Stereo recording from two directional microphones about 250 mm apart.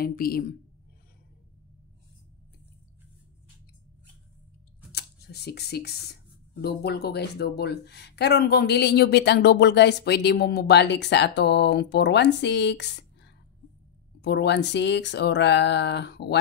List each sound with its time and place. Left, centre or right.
0.0 s speech: left
4.9 s speech: left